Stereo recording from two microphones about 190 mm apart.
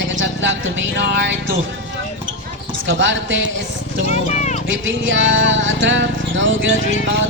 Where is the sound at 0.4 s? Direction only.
75° right (ahead or behind).